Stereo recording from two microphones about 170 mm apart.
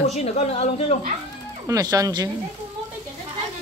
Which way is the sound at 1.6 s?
20° right (ahead or behind).